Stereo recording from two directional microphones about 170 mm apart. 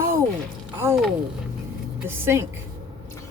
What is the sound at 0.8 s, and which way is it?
Speech, 15° right (ahead or behind).